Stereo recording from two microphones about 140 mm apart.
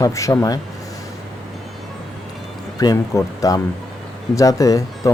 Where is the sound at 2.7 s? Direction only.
25° left (ahead or behind).